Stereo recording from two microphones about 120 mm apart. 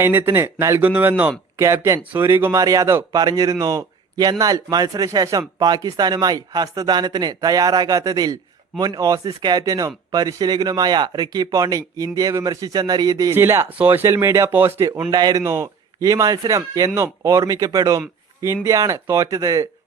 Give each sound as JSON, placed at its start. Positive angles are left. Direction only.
{"t": 0.0, "sound": "a man's voice", "side_deg": -20}
{"t": 15.1, "sound": "speech", "side_deg": -35}
{"t": 15.4, "sound": "speech", "side_deg": -25}